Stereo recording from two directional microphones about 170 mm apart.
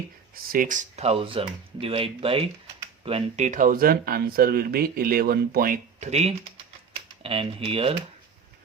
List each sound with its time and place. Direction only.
0.4 s speech: 55° right (ahead or behind); by 7.9 s 35° right (ahead or behind)